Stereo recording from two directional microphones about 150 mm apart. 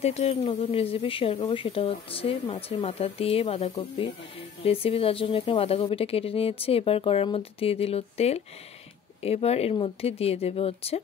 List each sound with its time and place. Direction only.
0.0 s speech: 45° left (ahead or behind)